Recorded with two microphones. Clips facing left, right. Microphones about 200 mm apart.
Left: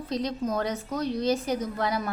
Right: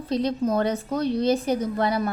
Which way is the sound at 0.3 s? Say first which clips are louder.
Right 7 dB; 30° right (ahead or behind).